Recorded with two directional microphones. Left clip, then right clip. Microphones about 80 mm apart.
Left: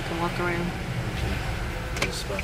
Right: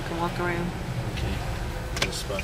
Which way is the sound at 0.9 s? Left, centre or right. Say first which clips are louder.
Left 1 dB; centre.